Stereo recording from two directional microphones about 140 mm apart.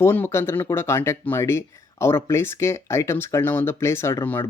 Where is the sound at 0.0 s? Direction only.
15° left (ahead or behind).